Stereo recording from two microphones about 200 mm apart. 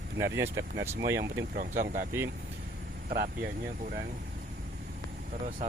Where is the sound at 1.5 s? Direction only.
40° right (ahead or behind).